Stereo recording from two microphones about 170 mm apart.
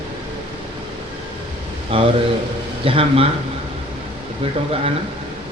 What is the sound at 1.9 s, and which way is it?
Speech, 30° right (ahead or behind).